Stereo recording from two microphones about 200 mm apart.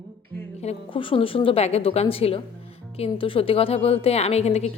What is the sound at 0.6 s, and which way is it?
A woman's voice, 30° left (ahead or behind).